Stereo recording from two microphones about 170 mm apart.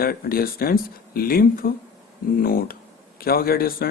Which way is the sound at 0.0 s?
60° left (ahead or behind).